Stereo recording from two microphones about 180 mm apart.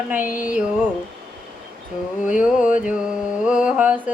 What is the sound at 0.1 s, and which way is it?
Mantra, 10° right (ahead or behind).